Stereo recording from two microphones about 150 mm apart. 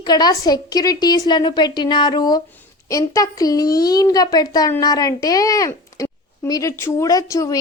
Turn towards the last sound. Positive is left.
turn(degrees=20)  # may be behind; listen again after turning